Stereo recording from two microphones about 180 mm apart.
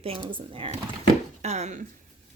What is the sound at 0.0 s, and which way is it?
Speech, 30° right (ahead or behind).